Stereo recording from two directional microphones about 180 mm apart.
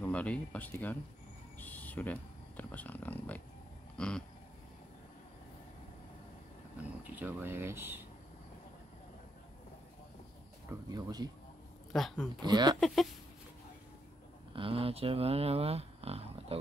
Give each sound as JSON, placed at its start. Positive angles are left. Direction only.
{"t": 0.0, "sound": "speech", "side_deg": 5}
{"t": 3.9, "sound": "a sound", "side_deg": 5}
{"t": 6.8, "sound": "speech", "side_deg": -10}
{"t": 10.7, "sound": "speech", "side_deg": -20}
{"t": 11.9, "sound": "speech", "side_deg": 0}
{"t": 12.4, "sound": "speech", "side_deg": -25}
{"t": 12.8, "sound": "speech", "side_deg": 0}
{"t": 14.5, "sound": "speech", "side_deg": -30}